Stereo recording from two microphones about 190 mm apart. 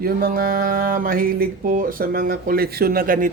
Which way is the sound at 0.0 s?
50° right (ahead or behind).